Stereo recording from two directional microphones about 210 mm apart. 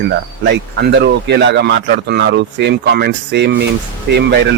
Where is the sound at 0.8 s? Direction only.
55° right (ahead or behind).